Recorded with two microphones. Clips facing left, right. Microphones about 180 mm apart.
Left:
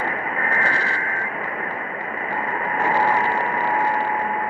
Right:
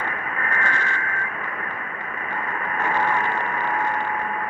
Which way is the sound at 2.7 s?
35° left (ahead or behind).